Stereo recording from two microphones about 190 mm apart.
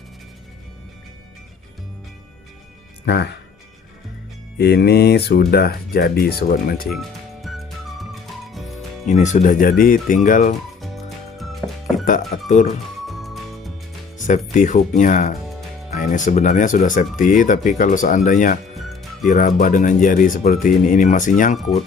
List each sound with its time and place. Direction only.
4.5 s speech: 60° left (ahead or behind)
6.8 s music: centre (ahead or behind)
9.0 s speech: 40° left (ahead or behind)
10.8 s music: centre (ahead or behind)
12.0 s speech: 45° left (ahead or behind)
13.1 s music: centre (ahead or behind)
14.2 s music: 40° left (ahead or behind)
14.5 s speech: 40° left (ahead or behind)
18.8 s music: centre (ahead or behind)
19.3 s speech: 45° left (ahead or behind)